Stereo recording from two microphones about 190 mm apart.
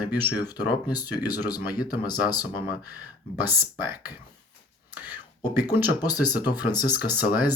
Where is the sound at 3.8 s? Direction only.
10° right (ahead or behind).